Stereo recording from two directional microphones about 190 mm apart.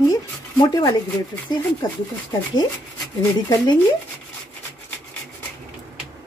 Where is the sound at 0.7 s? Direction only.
20° left (ahead or behind).